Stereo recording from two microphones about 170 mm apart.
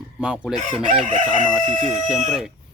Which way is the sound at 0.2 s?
5° right (ahead or behind).